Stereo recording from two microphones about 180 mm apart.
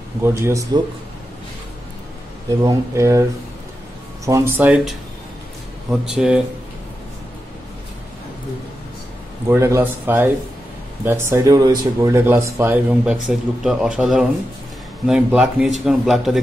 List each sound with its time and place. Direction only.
0.2 s speech: 15° right (ahead or behind)
2.6 s speech: 15° right (ahead or behind)
4.3 s speech: 15° right (ahead or behind)
9.5 s speech: 15° right (ahead or behind)